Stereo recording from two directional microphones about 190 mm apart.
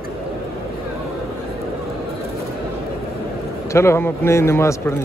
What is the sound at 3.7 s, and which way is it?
A man's voice, 15° left (ahead or behind).